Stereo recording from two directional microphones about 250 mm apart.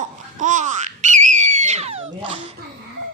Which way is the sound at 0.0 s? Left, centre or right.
Right.